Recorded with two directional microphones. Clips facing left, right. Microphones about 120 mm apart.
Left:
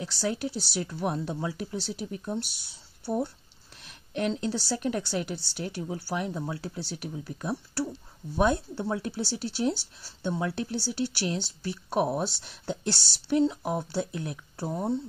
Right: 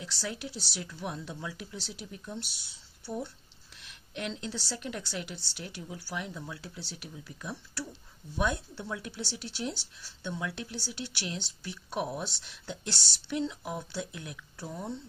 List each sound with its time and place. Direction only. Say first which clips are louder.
0.0 s speech: left 8 dB; 45° left (ahead or behind)
3.8 s speech: left 8 dB; 45° left (ahead or behind)